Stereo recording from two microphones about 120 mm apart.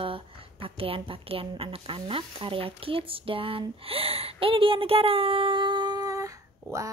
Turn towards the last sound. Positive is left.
turn(degrees=-25)  # may be behind; listen again after turning